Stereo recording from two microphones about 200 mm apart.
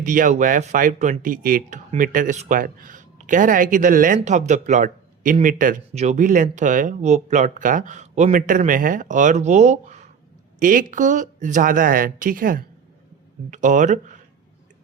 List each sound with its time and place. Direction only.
0.0 s speech: 40° right (ahead or behind)